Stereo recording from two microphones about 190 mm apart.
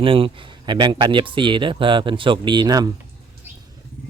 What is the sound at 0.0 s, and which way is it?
Speech, 30° right (ahead or behind).